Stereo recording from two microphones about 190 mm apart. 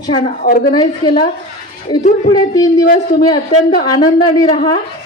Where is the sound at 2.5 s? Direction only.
20° left (ahead or behind).